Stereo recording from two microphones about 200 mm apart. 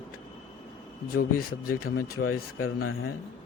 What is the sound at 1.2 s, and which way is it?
Speech, 45° left (ahead or behind).